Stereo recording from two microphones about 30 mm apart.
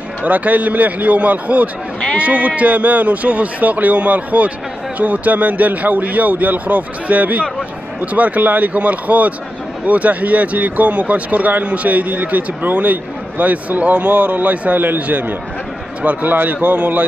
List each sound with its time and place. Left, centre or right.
0.2 s speech: right
16.3 s speech: right
16.6 s speech: right